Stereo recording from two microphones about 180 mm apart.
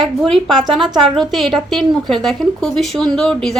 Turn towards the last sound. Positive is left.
turn(degrees=5)  # may be behind; listen again after turning